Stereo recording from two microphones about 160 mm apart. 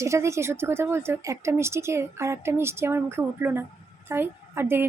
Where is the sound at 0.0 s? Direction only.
15° right (ahead or behind).